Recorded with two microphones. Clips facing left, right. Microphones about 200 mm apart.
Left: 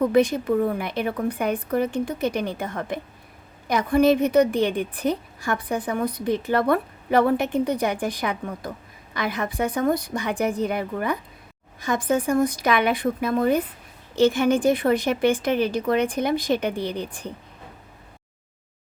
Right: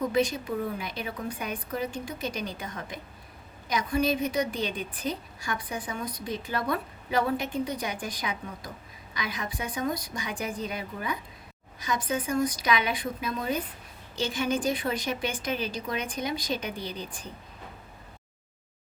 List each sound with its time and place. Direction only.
0.0 s a woman's voice: 60° left (ahead or behind)